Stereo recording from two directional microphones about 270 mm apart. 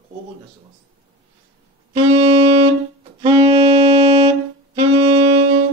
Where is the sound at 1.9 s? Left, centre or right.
Centre.